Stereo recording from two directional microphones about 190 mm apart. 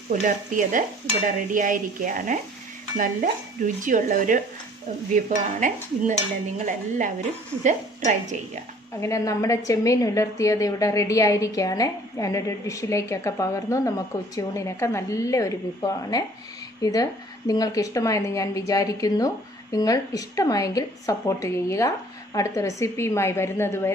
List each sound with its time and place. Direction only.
0.1 s stir: 40° right (ahead or behind)
7.6 s a woman's voice: 40° right (ahead or behind)
9.0 s a woman's voice: 15° left (ahead or behind)